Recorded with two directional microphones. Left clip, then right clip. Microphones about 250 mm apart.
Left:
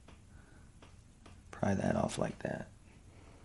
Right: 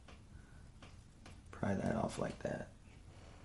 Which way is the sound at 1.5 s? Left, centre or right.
Left.